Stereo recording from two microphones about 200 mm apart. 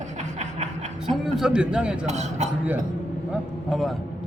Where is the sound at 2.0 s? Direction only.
35° right (ahead or behind).